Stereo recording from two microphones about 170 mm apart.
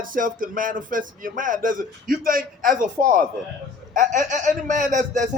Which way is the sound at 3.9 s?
50° right (ahead or behind).